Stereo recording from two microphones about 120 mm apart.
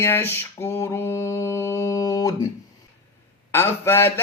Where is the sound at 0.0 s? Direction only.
20° left (ahead or behind).